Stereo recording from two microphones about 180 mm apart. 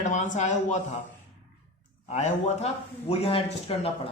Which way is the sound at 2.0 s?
40° left (ahead or behind).